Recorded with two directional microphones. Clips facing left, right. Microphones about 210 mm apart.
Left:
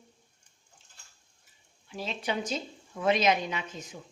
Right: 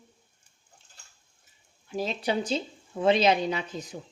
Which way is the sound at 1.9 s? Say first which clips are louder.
Right 5 dB; 40° right (ahead or behind).